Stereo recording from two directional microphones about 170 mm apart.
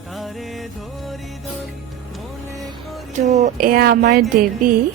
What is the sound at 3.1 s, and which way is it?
Speech, 45° right (ahead or behind).